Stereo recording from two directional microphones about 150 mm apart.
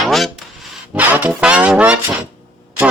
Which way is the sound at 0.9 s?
10° right (ahead or behind).